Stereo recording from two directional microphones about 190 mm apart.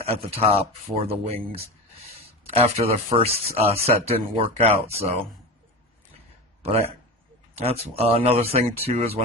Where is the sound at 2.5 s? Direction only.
35° right (ahead or behind).